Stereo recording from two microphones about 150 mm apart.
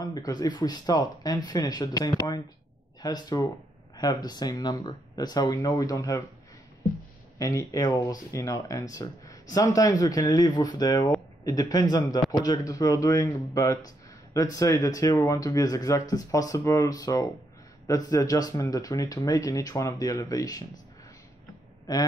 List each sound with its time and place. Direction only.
0.0 s speech: 25° left (ahead or behind)
7.3 s speech: 20° left (ahead or behind)